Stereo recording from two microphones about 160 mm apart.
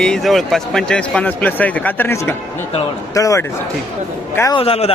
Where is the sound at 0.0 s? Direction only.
Centre (ahead or behind); by 3.4 s 20° left (ahead or behind).